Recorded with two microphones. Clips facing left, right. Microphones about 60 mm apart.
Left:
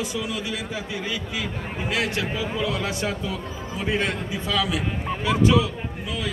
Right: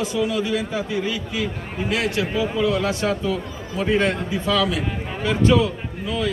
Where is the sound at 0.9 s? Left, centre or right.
Left.